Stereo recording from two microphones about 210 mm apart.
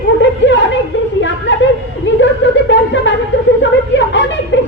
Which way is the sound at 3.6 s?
60° left (ahead or behind).